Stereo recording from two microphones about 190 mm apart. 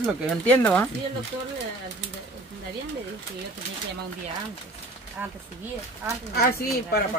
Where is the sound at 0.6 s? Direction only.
10° left (ahead or behind).